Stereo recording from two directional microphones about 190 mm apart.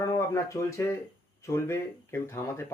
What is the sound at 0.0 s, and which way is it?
Speech, 15° left (ahead or behind).